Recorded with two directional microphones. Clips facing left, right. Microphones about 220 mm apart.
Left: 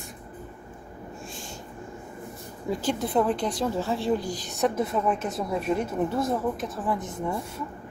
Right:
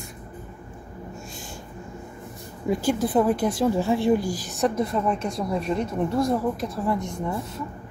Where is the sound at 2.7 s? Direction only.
15° right (ahead or behind).